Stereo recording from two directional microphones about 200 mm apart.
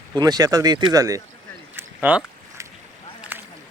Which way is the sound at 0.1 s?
20° right (ahead or behind).